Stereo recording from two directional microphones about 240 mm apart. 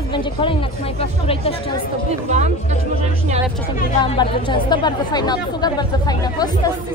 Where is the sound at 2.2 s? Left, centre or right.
Right.